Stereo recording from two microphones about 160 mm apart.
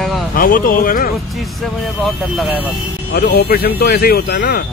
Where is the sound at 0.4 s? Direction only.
65° left (ahead or behind).